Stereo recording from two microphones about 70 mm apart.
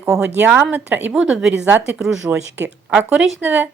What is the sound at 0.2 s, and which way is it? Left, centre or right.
Speech, right.